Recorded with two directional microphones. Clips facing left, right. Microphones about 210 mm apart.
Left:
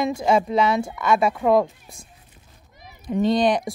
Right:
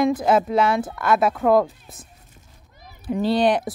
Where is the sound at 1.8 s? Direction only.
5° right (ahead or behind).